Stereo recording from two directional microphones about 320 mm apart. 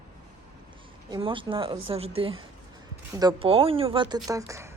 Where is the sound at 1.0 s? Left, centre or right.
Centre.